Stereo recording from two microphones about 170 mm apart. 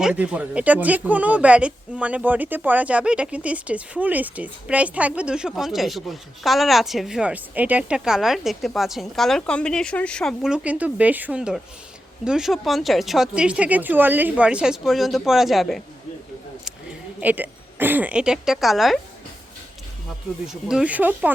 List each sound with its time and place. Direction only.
0.0 s speech: 5° right (ahead or behind)
17.2 s speech: 10° right (ahead or behind)
20.5 s speech: 5° right (ahead or behind)